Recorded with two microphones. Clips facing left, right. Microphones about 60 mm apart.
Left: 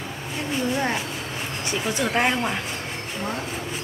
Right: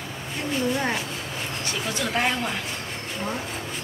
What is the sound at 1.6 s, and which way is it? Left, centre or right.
Speech, left.